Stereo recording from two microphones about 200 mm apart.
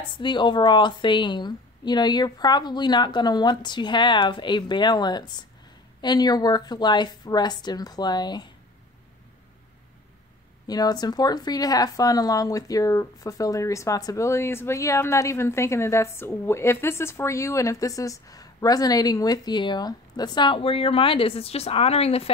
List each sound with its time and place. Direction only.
0.2 s a woman's voice: 25° left (ahead or behind)
10.7 s speech: 20° left (ahead or behind)